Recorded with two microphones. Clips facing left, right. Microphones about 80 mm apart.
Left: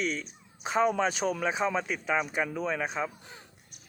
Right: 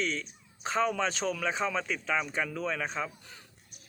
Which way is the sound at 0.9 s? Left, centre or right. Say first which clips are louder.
Left 3 dB; centre.